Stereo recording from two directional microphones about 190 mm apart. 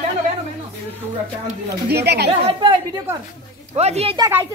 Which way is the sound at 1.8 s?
60° right (ahead or behind).